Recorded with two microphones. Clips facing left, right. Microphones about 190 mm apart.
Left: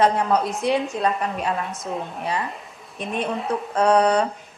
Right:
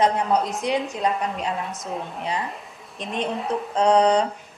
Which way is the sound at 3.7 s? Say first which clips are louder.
Even; 20° right (ahead or behind).